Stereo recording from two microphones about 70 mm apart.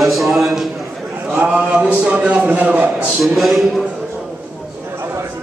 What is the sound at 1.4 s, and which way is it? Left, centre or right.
A man's voice, centre.